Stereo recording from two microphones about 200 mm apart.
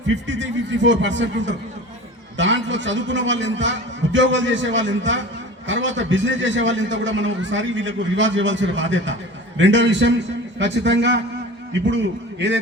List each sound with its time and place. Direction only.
0.3 s a man's voice: 65° right (ahead or behind)